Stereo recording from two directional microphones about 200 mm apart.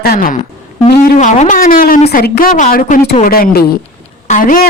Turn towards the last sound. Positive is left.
turn(degrees=45)  # may be behind; listen again after turning